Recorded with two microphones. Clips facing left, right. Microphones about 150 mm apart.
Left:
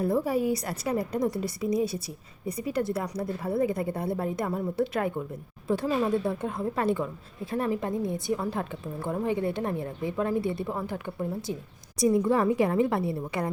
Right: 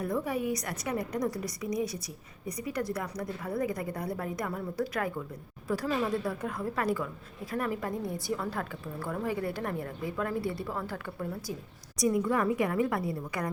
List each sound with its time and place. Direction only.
0.0 s a woman's voice: 30° left (ahead or behind)